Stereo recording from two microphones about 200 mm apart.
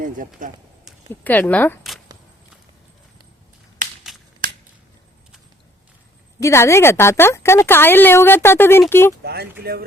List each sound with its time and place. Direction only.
0.4 s speech: 40° right (ahead or behind)
1.1 s speech: 10° left (ahead or behind)
3.8 s a sound: 40° right (ahead or behind)
6.4 s speech: 15° left (ahead or behind)
9.2 s speech: 50° right (ahead or behind)